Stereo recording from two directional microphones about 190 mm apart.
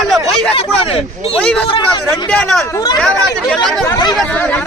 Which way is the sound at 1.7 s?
25° left (ahead or behind).